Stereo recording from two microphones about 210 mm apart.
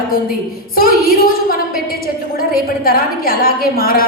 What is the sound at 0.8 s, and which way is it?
A woman's voice, 45° left (ahead or behind).